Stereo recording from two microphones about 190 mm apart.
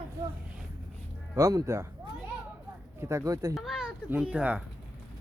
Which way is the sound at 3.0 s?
15° right (ahead or behind).